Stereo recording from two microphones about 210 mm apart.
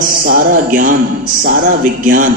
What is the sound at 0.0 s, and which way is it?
A man's voice, 40° right (ahead or behind).